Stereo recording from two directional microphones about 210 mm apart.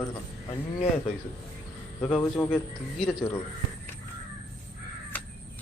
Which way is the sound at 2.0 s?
5° left (ahead or behind).